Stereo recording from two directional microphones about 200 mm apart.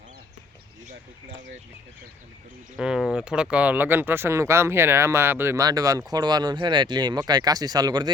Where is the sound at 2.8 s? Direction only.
5° right (ahead or behind).